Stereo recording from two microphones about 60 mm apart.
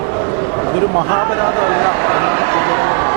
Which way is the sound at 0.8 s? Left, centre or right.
Right.